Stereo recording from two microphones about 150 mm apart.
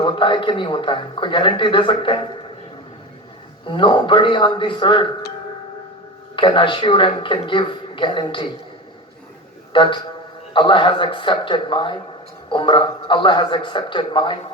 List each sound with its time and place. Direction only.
0.0 s a man's voice: 35° left (ahead or behind)
3.7 s a man's voice: 30° left (ahead or behind)
6.3 s a man's voice: 35° left (ahead or behind)
9.7 s a man's voice: 30° left (ahead or behind)